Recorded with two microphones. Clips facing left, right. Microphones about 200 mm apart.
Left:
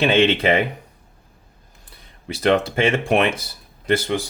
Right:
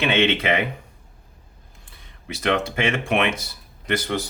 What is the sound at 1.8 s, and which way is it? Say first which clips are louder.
Speech: left 4 dB; 35° left (ahead or behind).